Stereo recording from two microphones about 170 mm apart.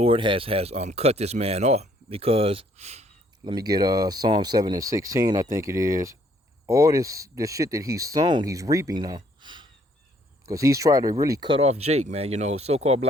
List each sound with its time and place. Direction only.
0.0 s speech: 30° right (ahead or behind)
3.5 s speech: 25° right (ahead or behind)